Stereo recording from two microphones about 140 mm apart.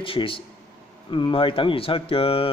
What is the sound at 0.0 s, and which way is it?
Speech, 40° left (ahead or behind).